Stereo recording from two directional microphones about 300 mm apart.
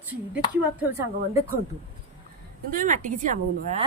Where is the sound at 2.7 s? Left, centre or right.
Right.